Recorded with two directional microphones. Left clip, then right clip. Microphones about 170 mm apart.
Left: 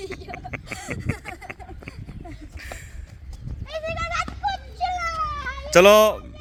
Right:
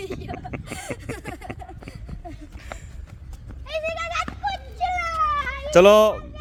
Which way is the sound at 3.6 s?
25° right (ahead or behind).